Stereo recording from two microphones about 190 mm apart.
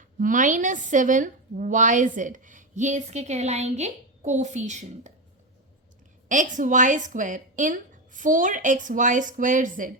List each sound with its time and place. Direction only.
0.0 s speech: 45° right (ahead or behind)
6.2 s a woman's voice: 40° right (ahead or behind)